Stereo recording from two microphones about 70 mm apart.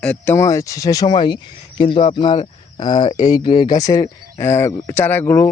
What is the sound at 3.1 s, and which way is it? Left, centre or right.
Speech, left.